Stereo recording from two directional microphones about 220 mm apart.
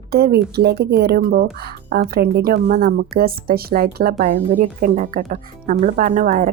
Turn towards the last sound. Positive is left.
turn(degrees=-35)  # may be behind; listen again after turning